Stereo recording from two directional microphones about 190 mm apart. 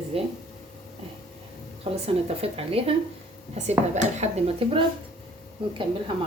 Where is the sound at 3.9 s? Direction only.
35° right (ahead or behind).